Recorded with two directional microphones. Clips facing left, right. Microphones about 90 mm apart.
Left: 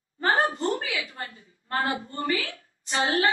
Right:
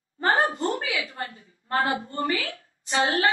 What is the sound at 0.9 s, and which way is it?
A woman's voice, 35° right (ahead or behind).